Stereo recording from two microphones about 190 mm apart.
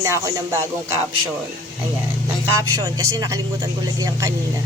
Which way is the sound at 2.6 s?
15° right (ahead or behind).